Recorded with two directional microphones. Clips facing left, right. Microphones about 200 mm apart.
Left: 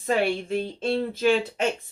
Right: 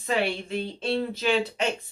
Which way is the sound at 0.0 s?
50° left (ahead or behind).